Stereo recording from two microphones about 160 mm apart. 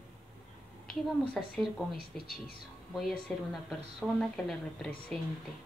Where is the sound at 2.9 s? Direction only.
Centre (ahead or behind).